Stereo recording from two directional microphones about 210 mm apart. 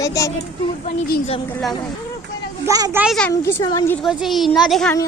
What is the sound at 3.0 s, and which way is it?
Speech, centre (ahead or behind).